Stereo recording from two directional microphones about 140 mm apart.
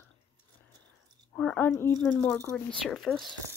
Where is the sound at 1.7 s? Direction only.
15° left (ahead or behind).